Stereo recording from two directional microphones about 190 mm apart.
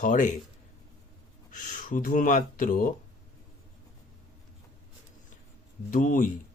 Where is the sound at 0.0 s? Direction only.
45° left (ahead or behind).